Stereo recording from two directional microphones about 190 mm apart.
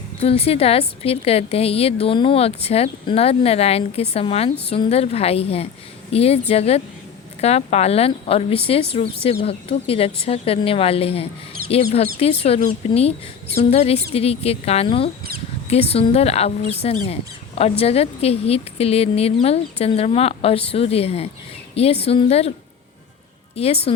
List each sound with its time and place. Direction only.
0.2 s speech: 30° left (ahead or behind)
23.6 s speech: 30° left (ahead or behind)